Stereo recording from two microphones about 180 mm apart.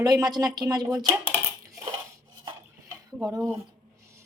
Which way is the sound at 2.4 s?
20° right (ahead or behind).